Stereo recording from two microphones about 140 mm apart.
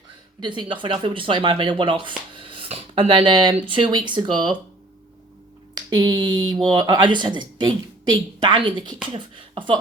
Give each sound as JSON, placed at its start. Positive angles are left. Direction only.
{"t": 0.3, "sound": "speech", "side_deg": -35}
{"t": 5.7, "sound": "a sound", "side_deg": -30}
{"t": 6.7, "sound": "speech", "side_deg": -30}